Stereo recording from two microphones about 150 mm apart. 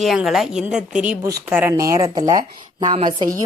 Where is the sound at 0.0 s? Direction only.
Centre (ahead or behind).